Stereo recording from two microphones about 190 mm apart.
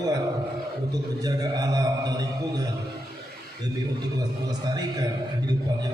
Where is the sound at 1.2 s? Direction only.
20° right (ahead or behind).